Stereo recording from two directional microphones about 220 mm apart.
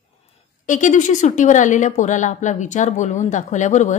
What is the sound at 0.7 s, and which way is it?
A woman's voice, 35° left (ahead or behind).